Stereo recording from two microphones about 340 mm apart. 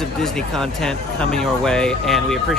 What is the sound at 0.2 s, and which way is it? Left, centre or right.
Speech, centre.